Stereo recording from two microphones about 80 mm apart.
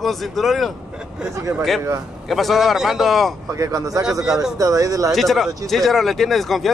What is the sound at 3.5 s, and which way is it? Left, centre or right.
Speech, right.